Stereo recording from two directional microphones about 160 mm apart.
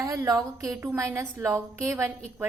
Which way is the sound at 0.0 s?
20° right (ahead or behind).